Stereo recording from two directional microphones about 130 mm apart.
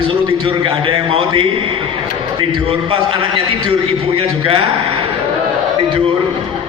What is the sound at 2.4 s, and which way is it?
A man's voice, 40° right (ahead or behind).